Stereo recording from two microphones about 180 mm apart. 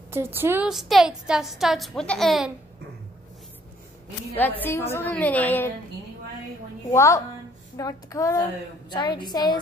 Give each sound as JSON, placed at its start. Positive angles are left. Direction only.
{"t": 0.1, "sound": "a woman's voice", "side_deg": -10}
{"t": 4.3, "sound": "a woman's voice", "side_deg": 10}
{"t": 6.9, "sound": "a woman's voice", "side_deg": 15}